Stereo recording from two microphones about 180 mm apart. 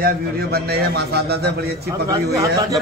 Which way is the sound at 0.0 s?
60° right (ahead or behind).